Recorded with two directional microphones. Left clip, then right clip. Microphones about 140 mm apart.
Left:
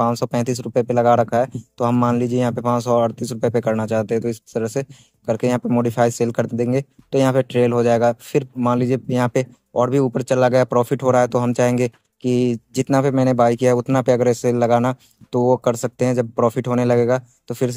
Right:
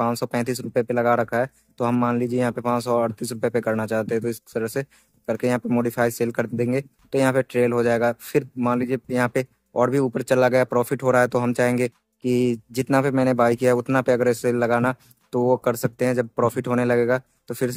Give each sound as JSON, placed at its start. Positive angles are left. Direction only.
{"t": 0.0, "sound": "speech", "side_deg": 15}